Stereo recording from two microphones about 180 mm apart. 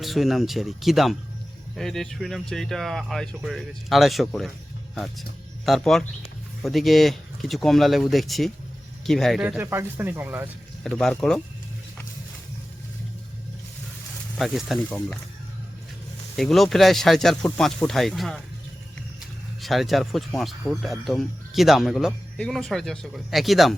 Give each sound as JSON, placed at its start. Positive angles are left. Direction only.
{"t": 0.0, "sound": "speech", "side_deg": 0}
{"t": 10.8, "sound": "speech", "side_deg": 0}
{"t": 14.3, "sound": "speech", "side_deg": 0}
{"t": 16.3, "sound": "speech", "side_deg": 0}
{"t": 19.6, "sound": "speech", "side_deg": 0}